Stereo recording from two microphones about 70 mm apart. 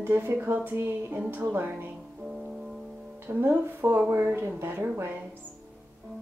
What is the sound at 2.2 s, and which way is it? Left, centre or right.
Music, centre.